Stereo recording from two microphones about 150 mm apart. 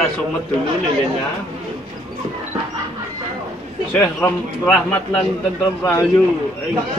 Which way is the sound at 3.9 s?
10° left (ahead or behind).